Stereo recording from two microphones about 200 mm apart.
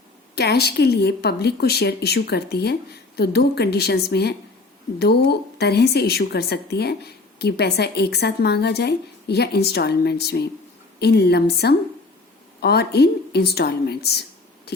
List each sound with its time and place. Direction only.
0.3 s a woman's voice: 55° left (ahead or behind)